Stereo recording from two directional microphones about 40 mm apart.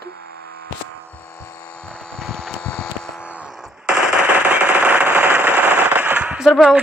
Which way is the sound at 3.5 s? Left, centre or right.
Centre.